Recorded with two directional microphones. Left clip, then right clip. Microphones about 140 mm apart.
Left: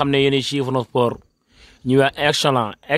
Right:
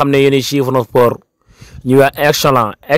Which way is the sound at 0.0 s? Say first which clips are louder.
Right 6 dB; 40° right (ahead or behind).